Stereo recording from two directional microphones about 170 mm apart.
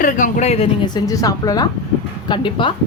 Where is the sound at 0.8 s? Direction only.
25° left (ahead or behind).